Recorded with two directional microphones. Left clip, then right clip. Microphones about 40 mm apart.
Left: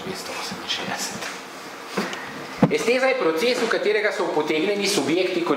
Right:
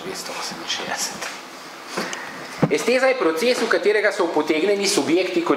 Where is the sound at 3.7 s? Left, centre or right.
Right.